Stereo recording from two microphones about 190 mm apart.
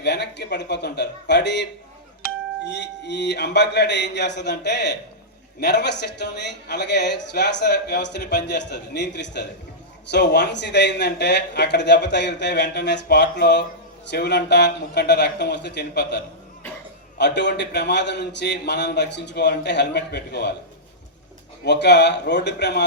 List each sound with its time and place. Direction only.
0.0 s a man's voice: 60° left (ahead or behind)
2.7 s a man's voice: 65° left (ahead or behind)
21.6 s a man's voice: 65° left (ahead or behind)